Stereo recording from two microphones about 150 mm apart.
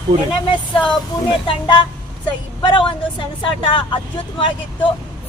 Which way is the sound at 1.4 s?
35° left (ahead or behind).